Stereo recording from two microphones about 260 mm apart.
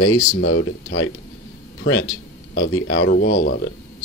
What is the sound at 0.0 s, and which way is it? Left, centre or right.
Speech, left.